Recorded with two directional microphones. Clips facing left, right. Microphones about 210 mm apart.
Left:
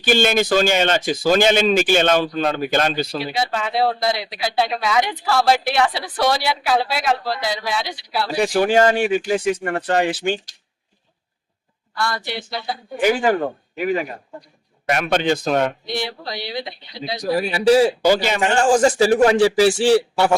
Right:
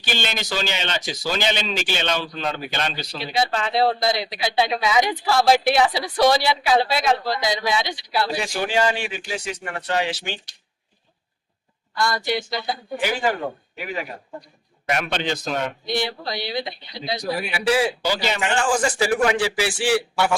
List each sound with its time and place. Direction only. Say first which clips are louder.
0.0 s speech: left 11 dB; 50° left (ahead or behind)
3.2 s speech: left 1 dB; 10° left (ahead or behind)
8.4 s speech: left 11 dB; 50° left (ahead or behind)
11.9 s speech: right 2 dB; 5° left (ahead or behind)
13.7 s speech: left 8 dB; 45° left (ahead or behind)
17.5 s a man's voice: left 7 dB; 40° left (ahead or behind)